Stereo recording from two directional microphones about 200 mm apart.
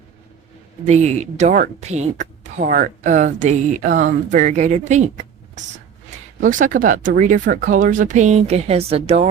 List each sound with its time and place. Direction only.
0.9 s speech: 35° right (ahead or behind)
6.4 s speech: 40° right (ahead or behind)